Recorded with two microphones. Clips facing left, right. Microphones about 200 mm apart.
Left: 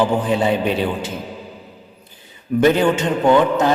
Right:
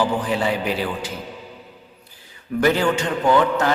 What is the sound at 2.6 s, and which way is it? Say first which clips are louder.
A man's voice: left 4 dB; 20° left (ahead or behind).